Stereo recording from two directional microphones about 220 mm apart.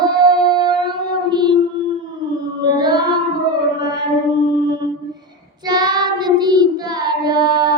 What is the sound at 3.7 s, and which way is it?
Music, 20° right (ahead or behind).